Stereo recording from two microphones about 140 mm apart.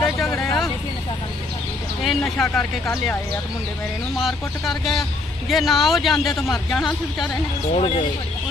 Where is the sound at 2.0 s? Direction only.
5° left (ahead or behind).